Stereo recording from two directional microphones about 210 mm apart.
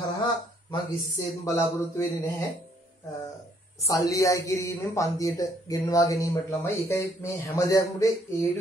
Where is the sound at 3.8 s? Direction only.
15° left (ahead or behind).